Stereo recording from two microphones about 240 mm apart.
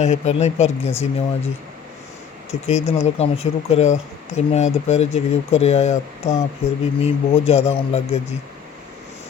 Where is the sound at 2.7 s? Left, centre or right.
Left.